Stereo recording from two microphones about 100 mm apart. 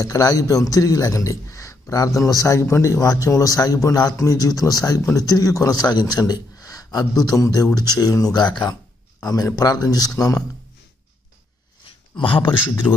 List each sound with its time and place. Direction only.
0.0 s a man's voice: 35° left (ahead or behind)
12.2 s a man's voice: 55° left (ahead or behind)